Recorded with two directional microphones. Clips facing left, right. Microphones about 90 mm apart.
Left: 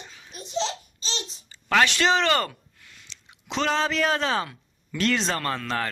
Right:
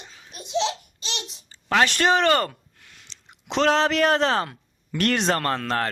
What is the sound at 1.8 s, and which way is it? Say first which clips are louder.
Speech: right 2 dB; 45° right (ahead or behind).